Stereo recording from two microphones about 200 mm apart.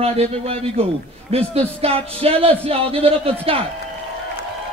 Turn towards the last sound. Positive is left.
turn(degrees=-30)  # may be behind; listen again after turning